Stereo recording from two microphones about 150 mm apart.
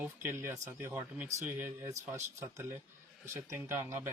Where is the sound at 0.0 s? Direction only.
15° right (ahead or behind).